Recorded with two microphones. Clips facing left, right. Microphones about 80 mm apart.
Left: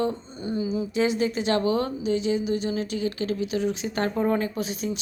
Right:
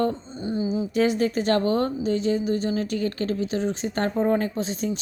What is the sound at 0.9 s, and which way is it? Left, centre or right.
A woman's voice, right.